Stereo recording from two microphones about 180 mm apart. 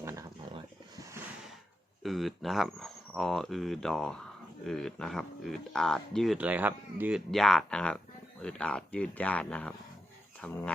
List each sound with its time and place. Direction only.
0.0 s a sound: 15° right (ahead or behind)
0.5 s roaring cats: 20° right (ahead or behind)
2.0 s speech: centre (ahead or behind)
6.3 s speech: 10° right (ahead or behind)
7.3 s speech: centre (ahead or behind)